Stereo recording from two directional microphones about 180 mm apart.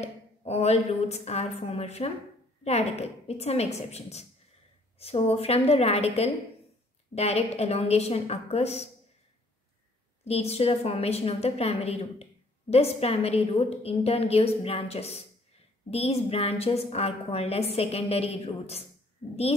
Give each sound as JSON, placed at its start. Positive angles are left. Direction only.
{"t": 0.0, "sound": "a woman's voice", "side_deg": 35}
{"t": 10.2, "sound": "a woman's voice", "side_deg": 35}